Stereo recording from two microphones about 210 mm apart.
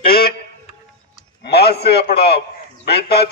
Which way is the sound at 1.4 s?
50° left (ahead or behind).